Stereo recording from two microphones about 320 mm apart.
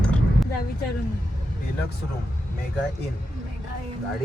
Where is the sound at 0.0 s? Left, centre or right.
Centre.